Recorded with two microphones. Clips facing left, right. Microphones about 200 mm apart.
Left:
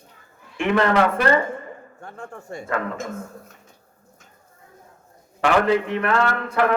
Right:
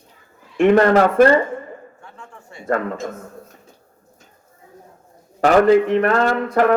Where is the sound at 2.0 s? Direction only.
45° left (ahead or behind).